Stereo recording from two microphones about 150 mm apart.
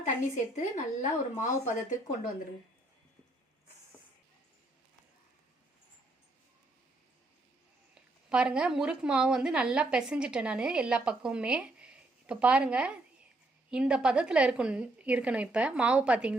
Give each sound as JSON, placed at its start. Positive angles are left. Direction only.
{"t": 0.0, "sound": "speech", "side_deg": 55}
{"t": 8.3, "sound": "a woman's voice", "side_deg": -5}